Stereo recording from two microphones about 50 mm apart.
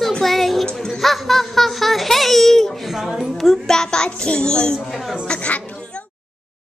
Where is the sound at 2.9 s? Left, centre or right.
Centre.